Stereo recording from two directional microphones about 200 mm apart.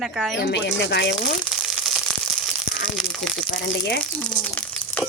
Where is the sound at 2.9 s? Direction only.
Centre (ahead or behind).